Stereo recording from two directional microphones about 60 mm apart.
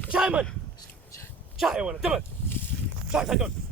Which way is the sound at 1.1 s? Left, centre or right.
Left.